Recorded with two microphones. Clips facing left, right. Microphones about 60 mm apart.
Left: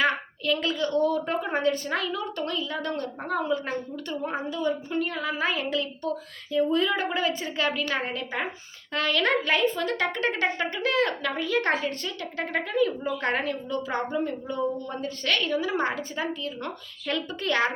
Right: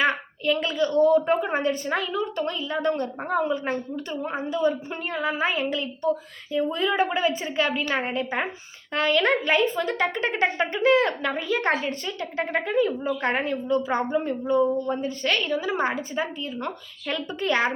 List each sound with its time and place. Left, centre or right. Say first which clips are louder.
0.0 s a sound: right 2 dB; centre
0.8 s speech: right 5 dB; centre
4.5 s a woman's voice: right 4 dB; right
13.4 s a woman's voice: right 5 dB; right
13.8 s a woman's voice: right 3 dB; centre